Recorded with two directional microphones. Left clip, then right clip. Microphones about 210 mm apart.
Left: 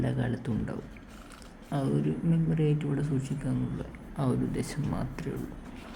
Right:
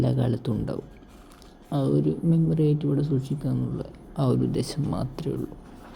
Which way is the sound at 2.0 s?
15° right (ahead or behind).